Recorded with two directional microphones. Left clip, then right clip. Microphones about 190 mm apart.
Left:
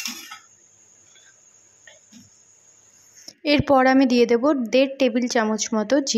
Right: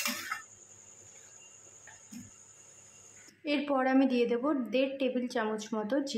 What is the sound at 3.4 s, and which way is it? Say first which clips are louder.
A woman's voice: left 13 dB; 40° left (ahead or behind).